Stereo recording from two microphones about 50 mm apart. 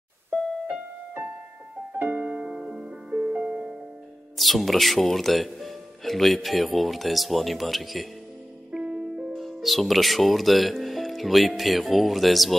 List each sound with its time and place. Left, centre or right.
2.0 s piano: right
2.2 s piano: centre
2.5 s music: centre
3.1 s music: right
3.4 s music: centre
4.4 s speech: centre
8.7 s music: centre
9.4 s speech: centre